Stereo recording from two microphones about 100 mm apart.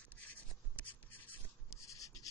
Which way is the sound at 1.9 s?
35° left (ahead or behind).